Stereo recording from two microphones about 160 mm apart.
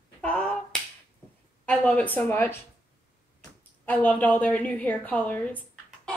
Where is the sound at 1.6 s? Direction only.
10° left (ahead or behind).